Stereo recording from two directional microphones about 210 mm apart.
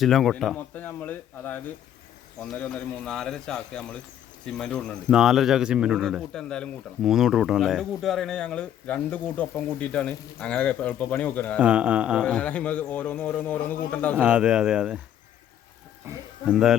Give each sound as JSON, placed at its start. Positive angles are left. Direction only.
{"t": 0.0, "sound": "a man's voice", "side_deg": 0}
{"t": 11.6, "sound": "a man's voice", "side_deg": -5}
{"t": 14.2, "sound": "a man's voice", "side_deg": -5}
{"t": 16.0, "sound": "speech", "side_deg": -5}